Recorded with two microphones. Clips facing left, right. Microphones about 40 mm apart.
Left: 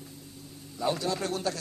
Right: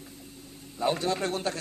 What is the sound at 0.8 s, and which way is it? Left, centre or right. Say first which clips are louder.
Speech: right 2 dB; right.